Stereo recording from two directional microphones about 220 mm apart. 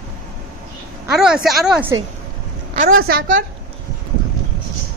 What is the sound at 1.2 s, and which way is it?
Speech, 5° right (ahead or behind).